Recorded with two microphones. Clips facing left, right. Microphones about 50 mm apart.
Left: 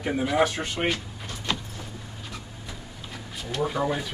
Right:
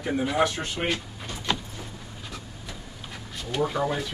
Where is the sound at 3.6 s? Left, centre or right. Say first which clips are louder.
Even; centre.